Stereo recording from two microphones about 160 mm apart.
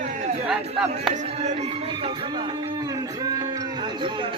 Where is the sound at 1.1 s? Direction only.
45° right (ahead or behind).